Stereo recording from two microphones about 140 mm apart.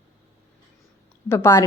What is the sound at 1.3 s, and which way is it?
Speech, 20° left (ahead or behind).